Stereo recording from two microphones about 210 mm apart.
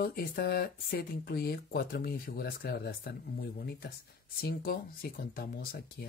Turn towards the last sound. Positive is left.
turn(degrees=45)  # may be behind; listen again after turning